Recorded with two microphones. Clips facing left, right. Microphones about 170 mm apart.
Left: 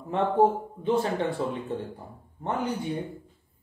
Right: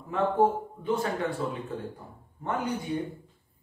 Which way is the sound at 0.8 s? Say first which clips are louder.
Left 3 dB; 30° left (ahead or behind).